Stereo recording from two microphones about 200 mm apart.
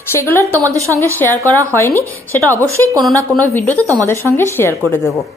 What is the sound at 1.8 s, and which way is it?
A woman's voice, 10° left (ahead or behind).